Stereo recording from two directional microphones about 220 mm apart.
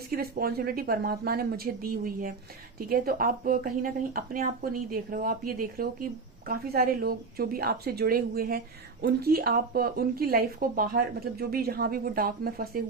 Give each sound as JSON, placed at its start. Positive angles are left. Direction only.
{"t": 0.1, "sound": "a woman's voice", "side_deg": -45}